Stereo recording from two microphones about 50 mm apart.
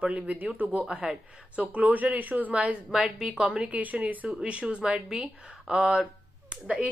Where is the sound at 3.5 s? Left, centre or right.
Right.